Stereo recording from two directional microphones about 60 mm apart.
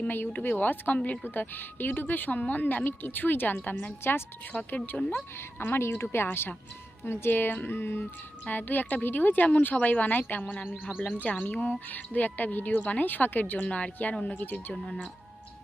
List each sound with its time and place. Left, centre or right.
0.0 s speech: left
4.0 s speech: left
4.5 s speech: centre
4.9 s speech: left
5.7 s speech: left
13.6 s speech: centre